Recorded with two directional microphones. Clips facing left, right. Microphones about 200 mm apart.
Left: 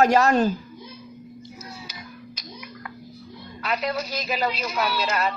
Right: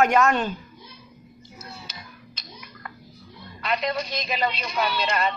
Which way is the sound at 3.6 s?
5° left (ahead or behind).